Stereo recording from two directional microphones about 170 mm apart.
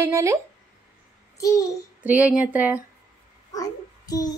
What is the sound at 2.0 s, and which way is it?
Speech, 10° right (ahead or behind).